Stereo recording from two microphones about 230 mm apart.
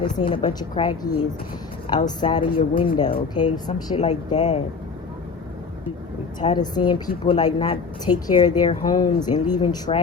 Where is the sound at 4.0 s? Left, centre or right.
Left.